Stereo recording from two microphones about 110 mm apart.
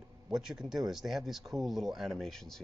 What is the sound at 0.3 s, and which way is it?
Speech, 5° right (ahead or behind).